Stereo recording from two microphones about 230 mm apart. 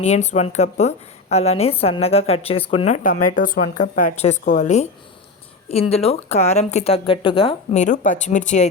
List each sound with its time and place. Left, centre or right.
0.0 s a woman's voice: left
5.9 s a woman's voice: left